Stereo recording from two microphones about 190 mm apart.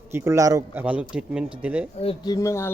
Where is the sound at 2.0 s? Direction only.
25° left (ahead or behind).